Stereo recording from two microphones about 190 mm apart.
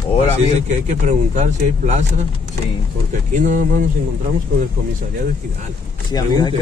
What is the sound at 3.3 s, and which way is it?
Speech, 40° right (ahead or behind).